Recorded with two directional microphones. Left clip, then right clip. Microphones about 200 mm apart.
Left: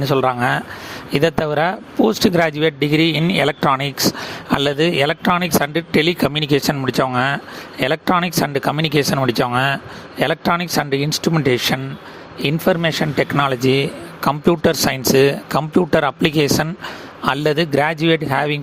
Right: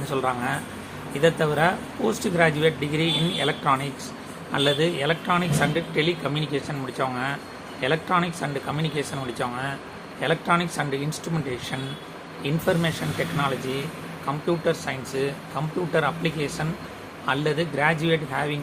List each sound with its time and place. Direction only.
0.0 s speech: 45° left (ahead or behind)